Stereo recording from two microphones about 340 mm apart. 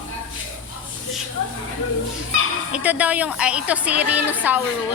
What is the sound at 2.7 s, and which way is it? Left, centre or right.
A woman's voice, centre.